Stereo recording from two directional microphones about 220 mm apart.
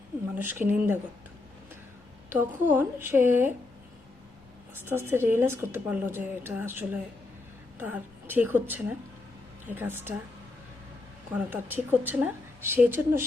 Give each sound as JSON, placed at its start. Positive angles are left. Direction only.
{"t": 0.3, "sound": "a woman's voice", "side_deg": -10}
{"t": 2.3, "sound": "a woman's voice", "side_deg": -10}
{"t": 4.9, "sound": "a woman's voice", "side_deg": -10}
{"t": 11.3, "sound": "a woman's voice", "side_deg": -10}